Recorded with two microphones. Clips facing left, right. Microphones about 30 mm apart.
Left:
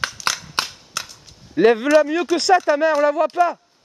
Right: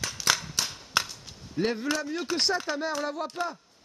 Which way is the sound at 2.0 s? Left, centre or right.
Left.